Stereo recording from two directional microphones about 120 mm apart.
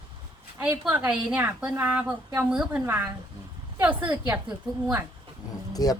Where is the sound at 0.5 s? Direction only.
20° right (ahead or behind).